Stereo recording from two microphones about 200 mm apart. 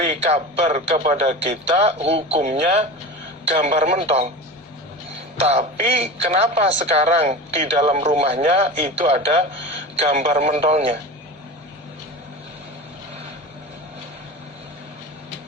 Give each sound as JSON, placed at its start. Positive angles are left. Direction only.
{"t": 0.3, "sound": "speech", "side_deg": -30}
{"t": 5.4, "sound": "speech", "side_deg": -30}